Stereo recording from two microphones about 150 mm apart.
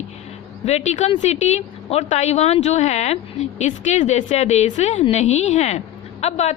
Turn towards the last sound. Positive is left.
turn(degrees=45)  # may be behind; listen again after turning